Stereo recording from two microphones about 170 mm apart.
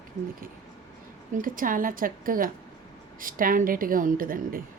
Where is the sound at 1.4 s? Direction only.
55° right (ahead or behind).